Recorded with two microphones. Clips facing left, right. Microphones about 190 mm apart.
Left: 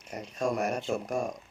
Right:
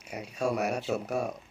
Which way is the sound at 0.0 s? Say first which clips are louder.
Even; 10° right (ahead or behind).